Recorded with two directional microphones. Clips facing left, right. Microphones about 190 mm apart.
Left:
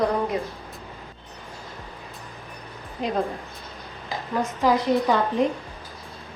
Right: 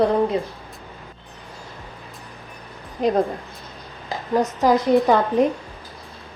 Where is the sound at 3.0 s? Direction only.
45° right (ahead or behind).